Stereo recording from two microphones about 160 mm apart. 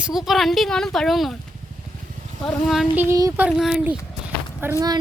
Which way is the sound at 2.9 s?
20° right (ahead or behind).